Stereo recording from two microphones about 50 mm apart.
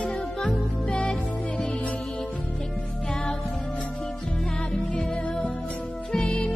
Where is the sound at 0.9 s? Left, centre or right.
Centre.